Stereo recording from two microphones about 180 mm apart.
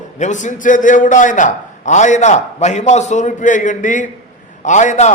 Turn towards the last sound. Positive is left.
turn(degrees=40)  # may be behind; listen again after turning